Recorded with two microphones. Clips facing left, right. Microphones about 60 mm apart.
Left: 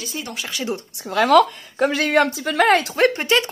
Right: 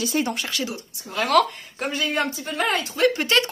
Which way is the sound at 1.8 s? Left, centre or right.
Left.